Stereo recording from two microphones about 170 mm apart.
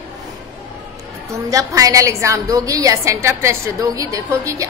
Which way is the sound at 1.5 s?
20° right (ahead or behind).